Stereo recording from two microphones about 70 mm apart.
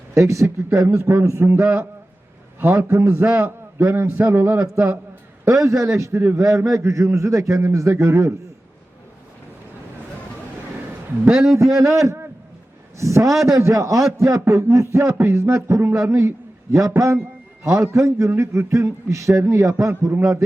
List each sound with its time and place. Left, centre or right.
0.1 s a man's voice: right
2.6 s a man's voice: right
3.3 s a man's voice: right
5.5 s a man's voice: right
11.3 s a man's voice: centre
11.5 s a man's voice: right